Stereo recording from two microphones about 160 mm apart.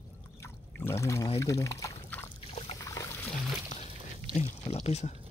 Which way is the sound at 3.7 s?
50° left (ahead or behind).